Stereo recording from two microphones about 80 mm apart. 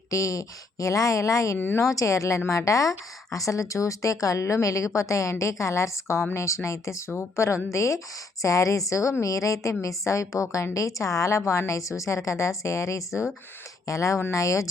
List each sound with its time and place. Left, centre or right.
0.1 s speech: left
1.5 s speech: left
1.8 s speech: left